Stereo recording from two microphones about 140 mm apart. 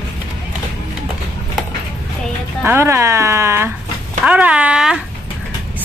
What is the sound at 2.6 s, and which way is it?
Speech, 15° right (ahead or behind).